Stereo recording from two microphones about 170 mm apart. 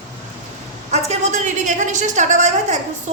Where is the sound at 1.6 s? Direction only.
45° right (ahead or behind).